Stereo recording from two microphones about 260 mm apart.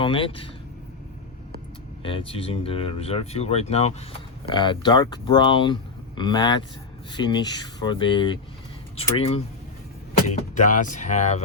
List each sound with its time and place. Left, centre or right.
0.0 s speech: left
2.0 s speech: centre